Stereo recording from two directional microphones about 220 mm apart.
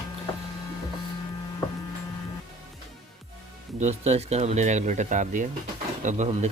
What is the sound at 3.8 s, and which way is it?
Speech, 30° right (ahead or behind).